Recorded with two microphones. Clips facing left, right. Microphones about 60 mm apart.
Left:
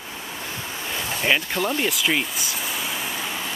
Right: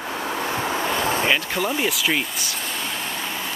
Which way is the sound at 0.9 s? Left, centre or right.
Right.